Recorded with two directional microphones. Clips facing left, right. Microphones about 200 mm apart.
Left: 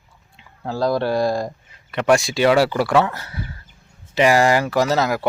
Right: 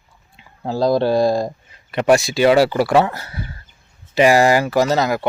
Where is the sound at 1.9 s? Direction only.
30° right (ahead or behind).